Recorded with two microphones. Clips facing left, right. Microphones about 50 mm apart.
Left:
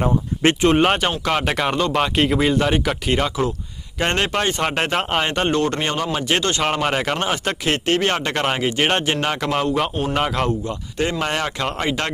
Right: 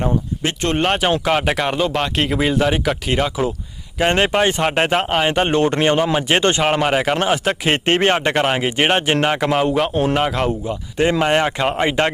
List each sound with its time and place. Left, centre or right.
0.6 s speech: centre
1.2 s speech: centre
5.5 s speech: right
6.6 s speech: centre
7.7 s speech: right
8.1 s speech: centre
11.2 s speech: right